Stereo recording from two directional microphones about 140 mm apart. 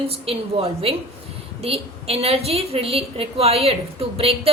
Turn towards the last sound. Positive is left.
turn(degrees=-45)  # may be behind; listen again after turning